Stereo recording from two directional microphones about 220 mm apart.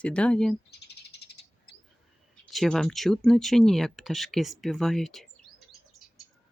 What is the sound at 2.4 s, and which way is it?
Speech, centre (ahead or behind).